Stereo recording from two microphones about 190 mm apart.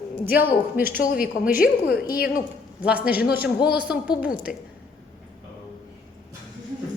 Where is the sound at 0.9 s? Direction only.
50° left (ahead or behind).